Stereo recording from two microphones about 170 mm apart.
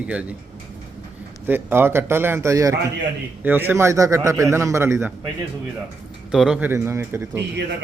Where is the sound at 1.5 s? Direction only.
15° right (ahead or behind).